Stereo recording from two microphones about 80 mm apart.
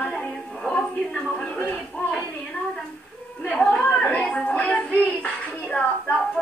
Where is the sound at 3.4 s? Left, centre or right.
Centre.